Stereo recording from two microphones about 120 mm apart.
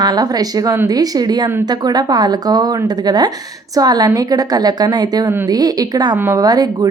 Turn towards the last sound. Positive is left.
turn(degrees=-30)  # may be behind; listen again after turning